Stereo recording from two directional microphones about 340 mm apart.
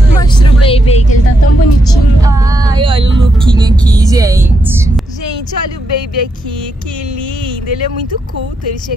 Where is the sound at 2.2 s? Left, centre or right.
Centre.